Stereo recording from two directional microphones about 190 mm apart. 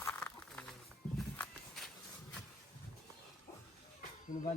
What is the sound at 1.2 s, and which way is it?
Walk, centre (ahead or behind).